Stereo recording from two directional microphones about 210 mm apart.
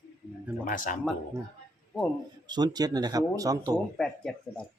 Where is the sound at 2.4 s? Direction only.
20° right (ahead or behind).